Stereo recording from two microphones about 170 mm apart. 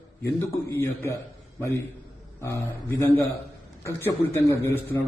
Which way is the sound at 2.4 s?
15° left (ahead or behind).